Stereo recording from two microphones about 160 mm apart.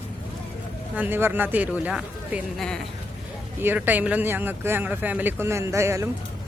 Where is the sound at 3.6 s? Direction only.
10° right (ahead or behind).